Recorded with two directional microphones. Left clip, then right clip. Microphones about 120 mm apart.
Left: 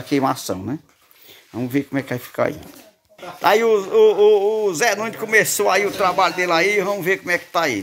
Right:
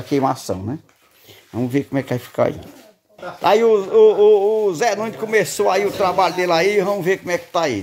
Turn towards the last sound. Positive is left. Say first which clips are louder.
# even
turn(degrees=-10)  # may be behind; listen again after turning